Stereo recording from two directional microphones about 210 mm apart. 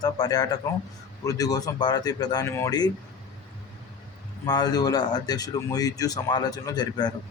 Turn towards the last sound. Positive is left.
turn(degrees=20)  # may be behind; listen again after turning